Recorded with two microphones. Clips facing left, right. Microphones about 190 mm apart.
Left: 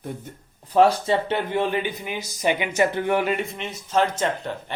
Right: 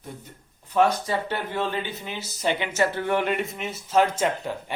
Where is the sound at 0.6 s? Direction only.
35° left (ahead or behind); by 3.3 s 15° left (ahead or behind).